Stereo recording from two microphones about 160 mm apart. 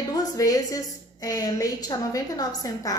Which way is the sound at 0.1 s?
25° left (ahead or behind).